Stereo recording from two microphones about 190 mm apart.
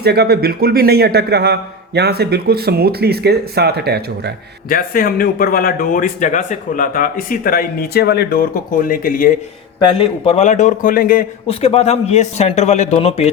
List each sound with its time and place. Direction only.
0.0 s a man's voice: 60° right (ahead or behind)
4.7 s speech: 50° left (ahead or behind)
9.8 s a man's voice: 30° left (ahead or behind); by 11.3 s 50° left (ahead or behind)
11.4 s a man's voice: 35° left (ahead or behind)